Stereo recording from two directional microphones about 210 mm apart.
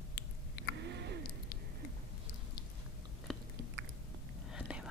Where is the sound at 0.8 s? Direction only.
55° right (ahead or behind).